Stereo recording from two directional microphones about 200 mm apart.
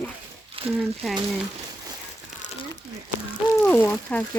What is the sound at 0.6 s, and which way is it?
Crumpling, 30° right (ahead or behind).